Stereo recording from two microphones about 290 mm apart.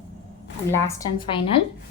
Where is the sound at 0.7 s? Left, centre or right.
Centre.